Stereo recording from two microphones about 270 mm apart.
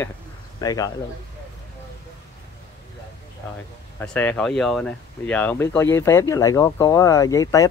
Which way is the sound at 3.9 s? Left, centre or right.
Centre.